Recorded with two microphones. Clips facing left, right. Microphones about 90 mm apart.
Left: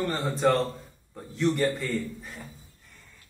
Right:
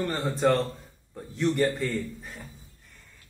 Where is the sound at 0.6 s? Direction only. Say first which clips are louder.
Left 1 dB; 10° left (ahead or behind).